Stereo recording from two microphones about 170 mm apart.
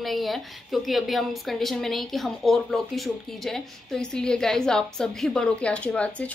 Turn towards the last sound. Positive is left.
turn(degrees=5)  # may be behind; listen again after turning